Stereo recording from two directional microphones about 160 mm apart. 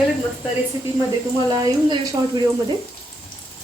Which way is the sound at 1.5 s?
20° right (ahead or behind).